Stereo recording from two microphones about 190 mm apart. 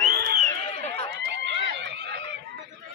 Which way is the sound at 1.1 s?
65° right (ahead or behind).